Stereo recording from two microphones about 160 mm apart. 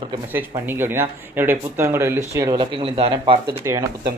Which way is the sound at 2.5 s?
35° right (ahead or behind).